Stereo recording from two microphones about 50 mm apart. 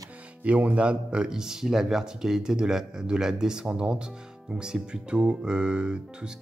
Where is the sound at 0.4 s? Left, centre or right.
Right.